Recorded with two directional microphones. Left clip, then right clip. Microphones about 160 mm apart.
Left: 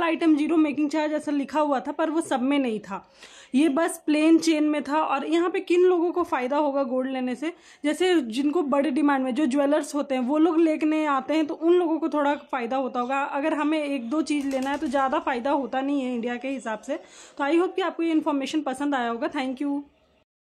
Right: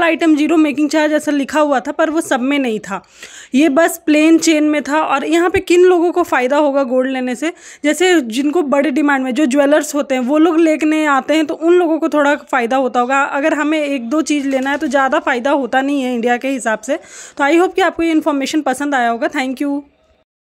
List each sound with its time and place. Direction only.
0.0 s a woman's voice: 20° right (ahead or behind)